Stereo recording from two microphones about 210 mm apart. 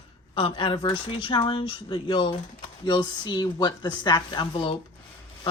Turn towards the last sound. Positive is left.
turn(degrees=25)  # may be behind; listen again after turning